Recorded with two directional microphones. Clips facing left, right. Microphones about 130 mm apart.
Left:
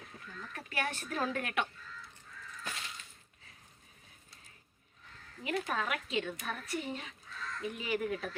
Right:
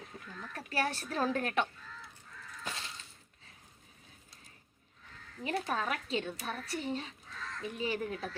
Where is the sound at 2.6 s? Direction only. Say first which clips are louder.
Right 2 dB; 30° right (ahead or behind).